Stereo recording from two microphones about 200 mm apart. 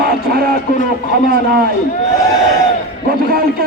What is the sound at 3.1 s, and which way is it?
Speech, 50° right (ahead or behind).